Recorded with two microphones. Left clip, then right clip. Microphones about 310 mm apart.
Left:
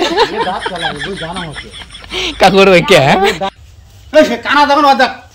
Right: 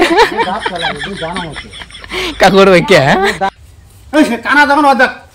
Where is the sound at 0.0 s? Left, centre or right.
Centre.